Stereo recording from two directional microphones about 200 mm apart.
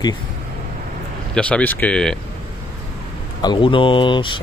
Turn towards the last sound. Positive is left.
turn(degrees=25)  # may be behind; listen again after turning